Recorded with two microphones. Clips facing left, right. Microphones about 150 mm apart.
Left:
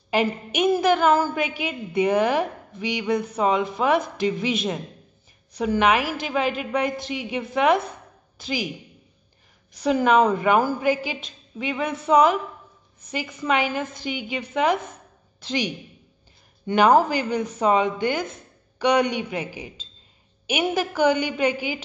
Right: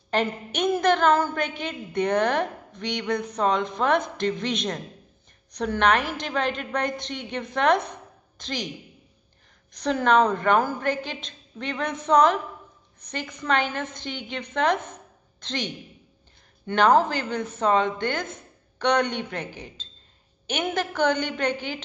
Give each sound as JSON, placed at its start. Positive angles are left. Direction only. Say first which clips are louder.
{"t": 0.1, "sound": "a woman's voice", "louder": "left 3 dB", "side_deg": 10}